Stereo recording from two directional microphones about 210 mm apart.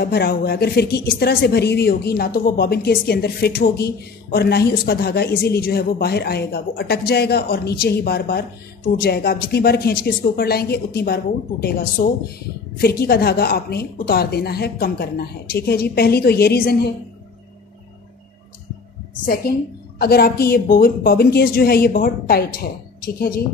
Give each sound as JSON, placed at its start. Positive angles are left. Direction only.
{"t": 0.0, "sound": "speech", "side_deg": 50}
{"t": 19.5, "sound": "speech", "side_deg": 45}